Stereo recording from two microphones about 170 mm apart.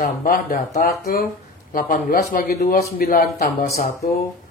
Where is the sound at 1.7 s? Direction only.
55° left (ahead or behind).